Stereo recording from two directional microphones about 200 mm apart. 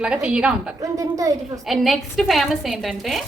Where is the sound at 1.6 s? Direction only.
Centre (ahead or behind).